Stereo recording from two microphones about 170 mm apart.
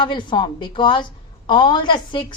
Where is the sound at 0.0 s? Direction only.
25° left (ahead or behind).